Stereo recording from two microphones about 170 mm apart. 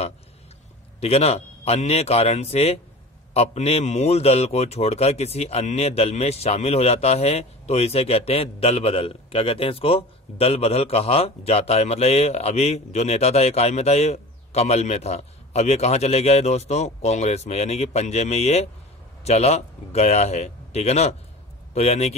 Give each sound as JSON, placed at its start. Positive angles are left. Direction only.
{"t": 1.0, "sound": "a man's voice", "side_deg": 35}